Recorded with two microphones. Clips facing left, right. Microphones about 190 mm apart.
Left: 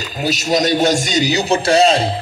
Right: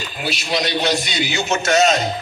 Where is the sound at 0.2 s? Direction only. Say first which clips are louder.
Left 6 dB; 40° left (ahead or behind).